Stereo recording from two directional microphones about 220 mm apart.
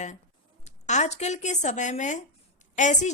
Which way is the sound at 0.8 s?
30° left (ahead or behind).